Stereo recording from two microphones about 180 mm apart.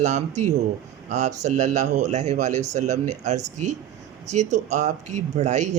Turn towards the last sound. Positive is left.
turn(degrees=-40)  # may be behind; listen again after turning